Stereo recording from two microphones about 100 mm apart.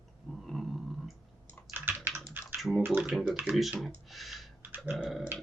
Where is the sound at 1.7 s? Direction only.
20° right (ahead or behind).